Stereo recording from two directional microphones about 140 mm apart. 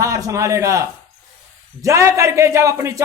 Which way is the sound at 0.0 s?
20° right (ahead or behind).